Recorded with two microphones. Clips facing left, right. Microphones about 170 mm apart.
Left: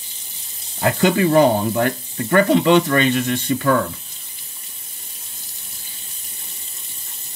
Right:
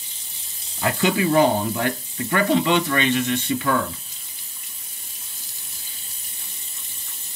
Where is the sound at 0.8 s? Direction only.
40° left (ahead or behind).